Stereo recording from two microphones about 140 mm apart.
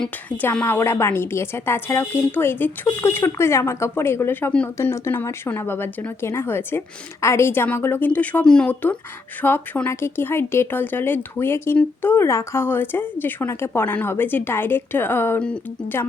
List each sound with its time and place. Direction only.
0.0 s speech: 10° left (ahead or behind)